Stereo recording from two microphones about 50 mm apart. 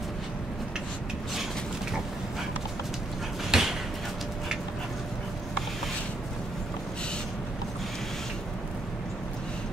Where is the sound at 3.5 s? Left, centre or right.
Centre.